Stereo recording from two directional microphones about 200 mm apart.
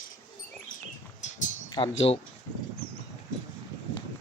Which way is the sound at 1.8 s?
25° left (ahead or behind).